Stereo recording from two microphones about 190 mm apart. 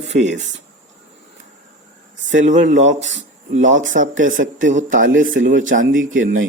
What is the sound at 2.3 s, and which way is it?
Speech, 40° right (ahead or behind).